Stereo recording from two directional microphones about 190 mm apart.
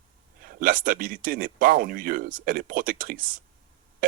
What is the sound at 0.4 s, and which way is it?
Speech, 45° right (ahead or behind).